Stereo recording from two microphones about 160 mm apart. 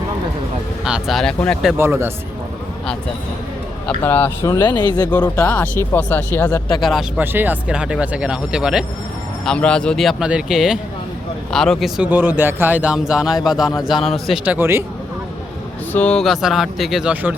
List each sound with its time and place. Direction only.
0.9 s speech: 5° right (ahead or behind)
1.8 s speech: 15° right (ahead or behind)
3.8 s speech: 10° left (ahead or behind)
4.6 s speech: 25° left (ahead or behind)
5.2 s speech: 15° left (ahead or behind)
7.2 s speech: 10° right (ahead or behind)
9.4 s speech: 5° left (ahead or behind)
14.4 s speech: 10° right (ahead or behind)
15.9 s speech: 10° left (ahead or behind)